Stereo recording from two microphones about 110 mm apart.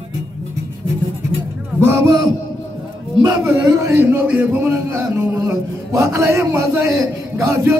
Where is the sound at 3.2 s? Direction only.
30° right (ahead or behind).